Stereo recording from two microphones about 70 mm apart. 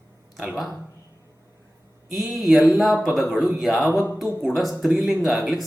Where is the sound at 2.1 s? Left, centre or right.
Centre.